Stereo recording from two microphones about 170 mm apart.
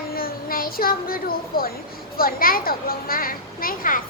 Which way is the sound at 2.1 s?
60° left (ahead or behind).